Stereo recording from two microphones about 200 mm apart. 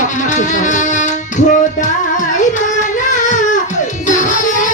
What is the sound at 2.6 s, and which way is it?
Singing, 40° left (ahead or behind).